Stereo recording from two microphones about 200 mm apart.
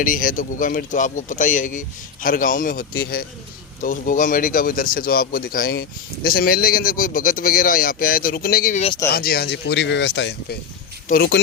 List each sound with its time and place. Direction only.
0.0 s speech: 45° left (ahead or behind)